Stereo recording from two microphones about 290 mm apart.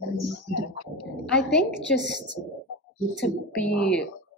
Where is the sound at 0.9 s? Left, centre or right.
Centre.